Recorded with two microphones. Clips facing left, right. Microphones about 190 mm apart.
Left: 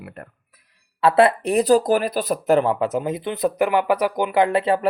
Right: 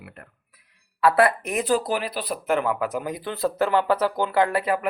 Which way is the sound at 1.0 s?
25° left (ahead or behind).